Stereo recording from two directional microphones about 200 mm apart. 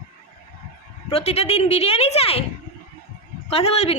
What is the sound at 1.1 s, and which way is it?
A woman's voice, 30° left (ahead or behind).